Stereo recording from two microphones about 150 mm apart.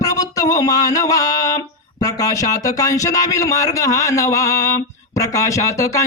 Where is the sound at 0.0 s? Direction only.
25° left (ahead or behind).